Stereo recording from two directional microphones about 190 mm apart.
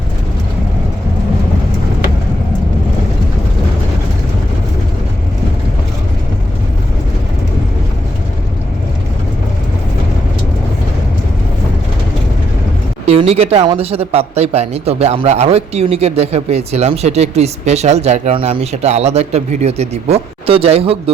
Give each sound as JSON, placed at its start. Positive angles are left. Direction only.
{"t": 13.1, "sound": "speech", "side_deg": -30}